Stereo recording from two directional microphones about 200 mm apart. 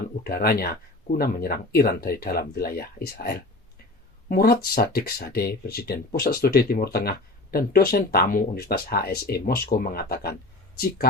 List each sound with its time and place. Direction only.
0.3 s speech: 50° left (ahead or behind)